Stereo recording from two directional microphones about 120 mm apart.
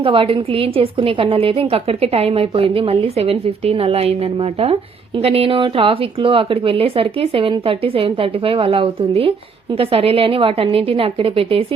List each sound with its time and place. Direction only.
0.0 s a woman's voice: 45° right (ahead or behind)